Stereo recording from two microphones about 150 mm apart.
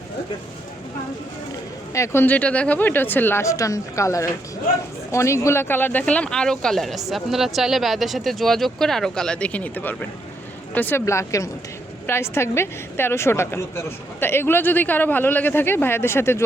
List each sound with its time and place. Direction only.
1.9 s a woman's voice: 20° left (ahead or behind)